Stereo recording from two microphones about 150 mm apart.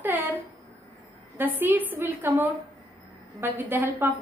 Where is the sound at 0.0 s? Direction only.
10° right (ahead or behind).